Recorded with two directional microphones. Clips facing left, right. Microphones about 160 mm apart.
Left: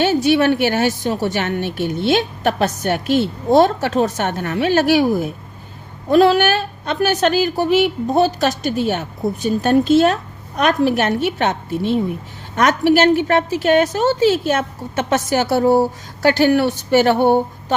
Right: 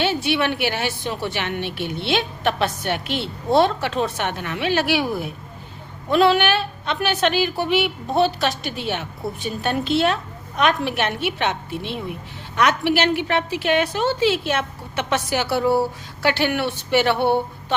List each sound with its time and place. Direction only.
0.0 s a woman's voice: 40° left (ahead or behind)